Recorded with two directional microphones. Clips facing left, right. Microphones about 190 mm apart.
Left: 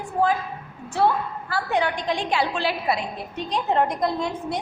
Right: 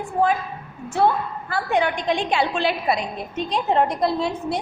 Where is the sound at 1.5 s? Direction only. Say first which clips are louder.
Right 2 dB; 20° right (ahead or behind).